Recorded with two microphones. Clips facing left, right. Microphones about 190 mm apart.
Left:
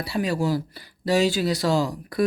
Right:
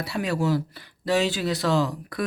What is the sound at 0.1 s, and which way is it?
Speech, 20° left (ahead or behind).